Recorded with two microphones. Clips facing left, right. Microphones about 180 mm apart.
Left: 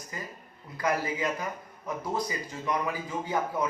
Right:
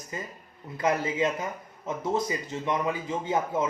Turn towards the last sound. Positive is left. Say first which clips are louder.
# right 2 dB
turn(degrees=-25)  # may be behind; listen again after turning